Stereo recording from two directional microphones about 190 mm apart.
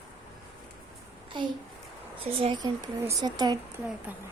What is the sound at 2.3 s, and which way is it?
Speech, 25° right (ahead or behind).